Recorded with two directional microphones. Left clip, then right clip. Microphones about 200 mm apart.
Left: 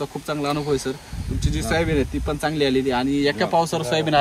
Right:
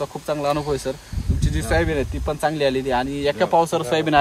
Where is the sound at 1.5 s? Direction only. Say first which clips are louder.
Right 1 dB; 50° right (ahead or behind).